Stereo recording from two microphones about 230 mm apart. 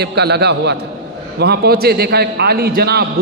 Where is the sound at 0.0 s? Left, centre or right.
Right.